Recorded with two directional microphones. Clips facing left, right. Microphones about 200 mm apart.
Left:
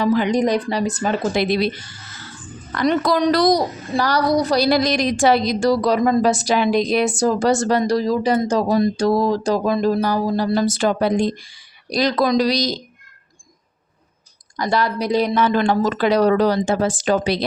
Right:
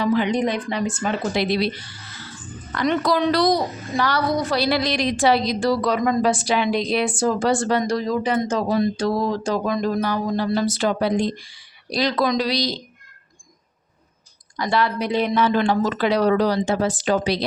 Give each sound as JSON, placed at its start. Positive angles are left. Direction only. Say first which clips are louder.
{"t": 0.0, "sound": "a woman's voice", "louder": "left 3 dB", "side_deg": 45}
{"t": 14.5, "sound": "speech", "louder": "left 1 dB", "side_deg": 40}